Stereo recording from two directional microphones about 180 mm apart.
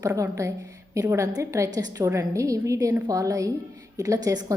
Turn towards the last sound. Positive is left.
turn(degrees=-20)  # may be behind; listen again after turning